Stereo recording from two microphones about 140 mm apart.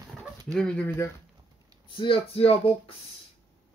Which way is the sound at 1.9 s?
40° left (ahead or behind).